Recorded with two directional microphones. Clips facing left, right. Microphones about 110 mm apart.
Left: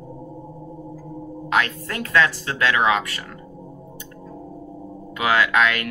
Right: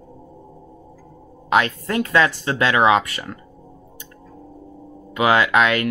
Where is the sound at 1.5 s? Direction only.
25° right (ahead or behind).